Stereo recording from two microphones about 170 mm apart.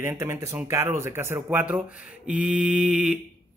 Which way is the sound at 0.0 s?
15° right (ahead or behind).